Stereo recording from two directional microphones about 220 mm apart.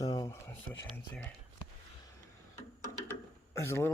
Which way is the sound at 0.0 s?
15° left (ahead or behind).